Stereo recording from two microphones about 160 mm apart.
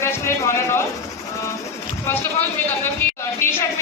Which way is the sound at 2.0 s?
15° left (ahead or behind).